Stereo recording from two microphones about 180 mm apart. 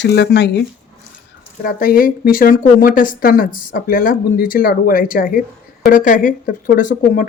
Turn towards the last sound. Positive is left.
turn(degrees=50)  # may be behind; listen again after turning